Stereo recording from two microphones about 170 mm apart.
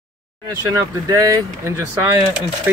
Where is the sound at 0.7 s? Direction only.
20° right (ahead or behind).